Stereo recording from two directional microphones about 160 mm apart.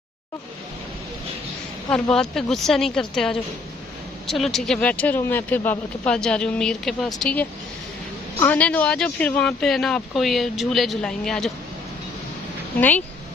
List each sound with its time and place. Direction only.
1.9 s speech: 5° left (ahead or behind)
12.7 s speech: 10° left (ahead or behind)